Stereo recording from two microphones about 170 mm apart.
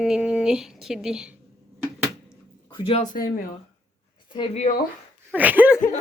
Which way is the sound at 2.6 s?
30° left (ahead or behind).